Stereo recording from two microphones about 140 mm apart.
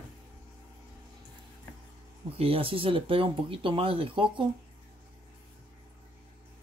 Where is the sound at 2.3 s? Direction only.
45° right (ahead or behind).